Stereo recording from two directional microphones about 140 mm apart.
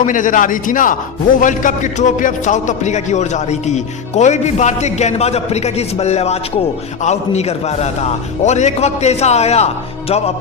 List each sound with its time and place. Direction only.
0.0 s a man's voice: 70° left (ahead or behind); by 10.3 s 50° left (ahead or behind)